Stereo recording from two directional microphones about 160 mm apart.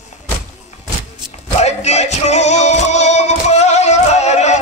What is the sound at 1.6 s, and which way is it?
Music, 45° left (ahead or behind).